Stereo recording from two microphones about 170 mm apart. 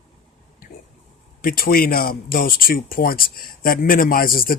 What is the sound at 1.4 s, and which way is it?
Speech, 60° left (ahead or behind).